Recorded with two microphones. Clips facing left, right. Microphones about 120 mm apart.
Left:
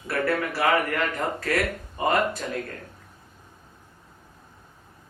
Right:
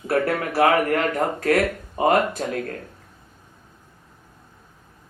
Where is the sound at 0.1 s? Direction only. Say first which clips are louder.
Right 4 dB; 45° right (ahead or behind).